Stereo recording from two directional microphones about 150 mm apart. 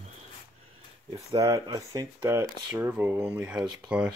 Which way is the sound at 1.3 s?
20° right (ahead or behind).